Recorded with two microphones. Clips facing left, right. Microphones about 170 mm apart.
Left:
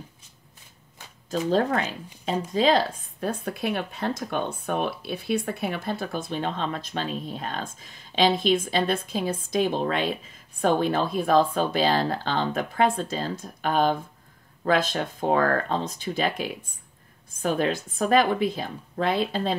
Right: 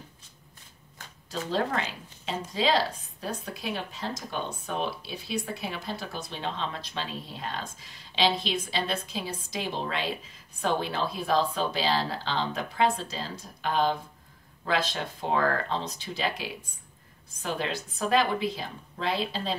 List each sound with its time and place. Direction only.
1.5 s speech: 50° left (ahead or behind)